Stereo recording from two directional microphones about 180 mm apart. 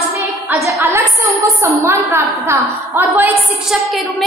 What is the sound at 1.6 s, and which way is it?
A woman's voice, 15° right (ahead or behind).